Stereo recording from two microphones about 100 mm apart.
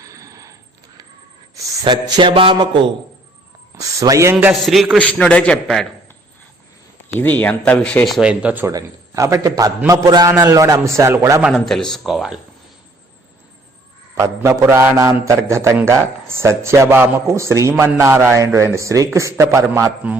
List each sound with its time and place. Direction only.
0.0 s a sound: 35° right (ahead or behind)
1.8 s a sound: 45° right (ahead or behind)
2.3 s speech: 60° right (ahead or behind)
3.8 s a man's voice: 35° right (ahead or behind)
4.6 s speech: centre (ahead or behind)
7.2 s speech: 15° left (ahead or behind)
8.0 s speech: centre (ahead or behind)
8.3 s speech: 15° right (ahead or behind)
8.6 s a man's voice: 30° right (ahead or behind)
11.6 s speech: 5° left (ahead or behind)
14.2 s a man's voice: 30° right (ahead or behind)